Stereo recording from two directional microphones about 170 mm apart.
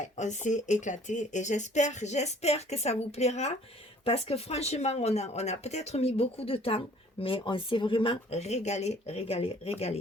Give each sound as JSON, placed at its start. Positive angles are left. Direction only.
{"t": 0.0, "sound": "speech", "side_deg": 45}